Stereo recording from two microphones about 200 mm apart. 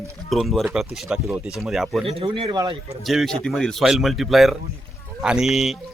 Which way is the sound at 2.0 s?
25° right (ahead or behind).